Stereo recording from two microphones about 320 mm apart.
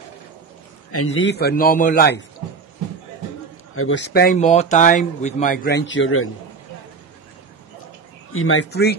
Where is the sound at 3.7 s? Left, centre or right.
Left.